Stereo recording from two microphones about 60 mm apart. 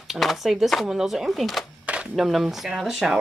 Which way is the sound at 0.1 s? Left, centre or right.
Centre.